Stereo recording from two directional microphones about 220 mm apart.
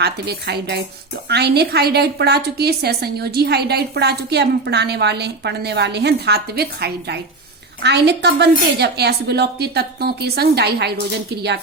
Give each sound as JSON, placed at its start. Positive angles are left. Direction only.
{"t": 0.0, "sound": "a woman's voice", "side_deg": -45}